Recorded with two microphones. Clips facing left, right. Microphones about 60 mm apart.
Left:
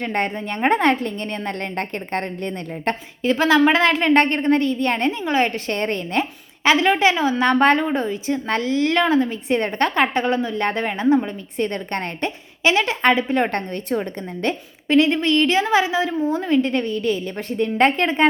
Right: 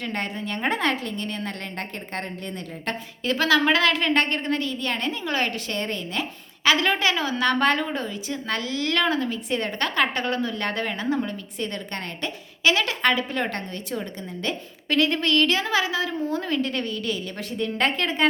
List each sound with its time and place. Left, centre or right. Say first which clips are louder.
0.0 s a woman's voice: left 6 dB; left
3.2 s a woman's voice: left 5 dB; left
6.7 s a woman's voice: left 5 dB; left
14.8 s a woman's voice: left 5 dB; left